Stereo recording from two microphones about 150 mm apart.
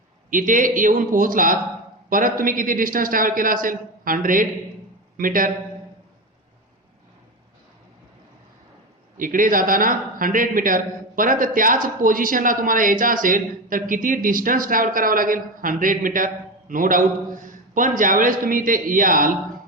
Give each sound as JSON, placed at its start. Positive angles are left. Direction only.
{"t": 0.3, "sound": "a man's voice", "side_deg": -65}
{"t": 9.1, "sound": "speech", "side_deg": -65}